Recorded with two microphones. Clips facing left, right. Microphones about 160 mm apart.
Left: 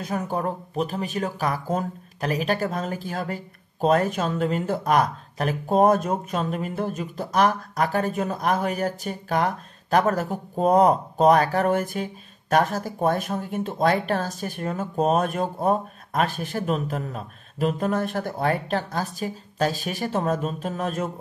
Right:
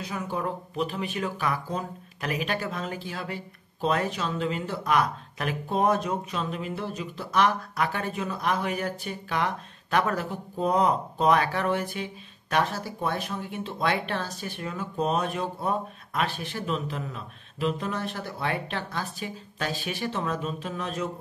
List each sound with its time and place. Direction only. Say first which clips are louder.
0.0 s speech: left 4 dB; 45° left (ahead or behind)